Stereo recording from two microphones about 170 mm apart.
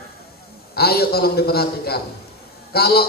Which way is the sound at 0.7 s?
65° left (ahead or behind).